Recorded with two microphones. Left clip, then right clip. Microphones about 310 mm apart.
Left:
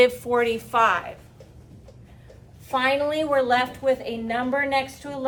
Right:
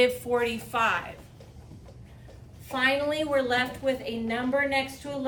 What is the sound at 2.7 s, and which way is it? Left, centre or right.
A woman's voice, centre.